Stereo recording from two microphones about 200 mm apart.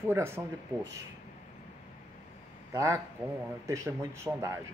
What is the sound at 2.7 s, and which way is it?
Speech, 15° right (ahead or behind).